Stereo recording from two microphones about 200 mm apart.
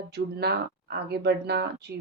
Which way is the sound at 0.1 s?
55° right (ahead or behind).